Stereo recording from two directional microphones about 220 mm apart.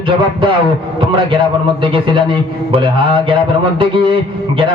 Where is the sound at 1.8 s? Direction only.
25° right (ahead or behind).